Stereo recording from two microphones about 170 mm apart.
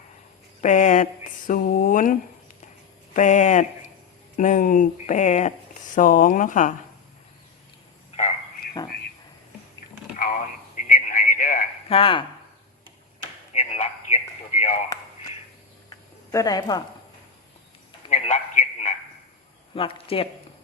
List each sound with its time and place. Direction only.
0.6 s speech: 50° left (ahead or behind)
10.8 s radio: 55° left (ahead or behind)
11.9 s speech: 35° left (ahead or behind)
13.5 s radio: 45° left (ahead or behind)
15.9 s a sound: 20° left (ahead or behind)
18.1 s a sound: 45° left (ahead or behind)
19.7 s speech: 35° left (ahead or behind)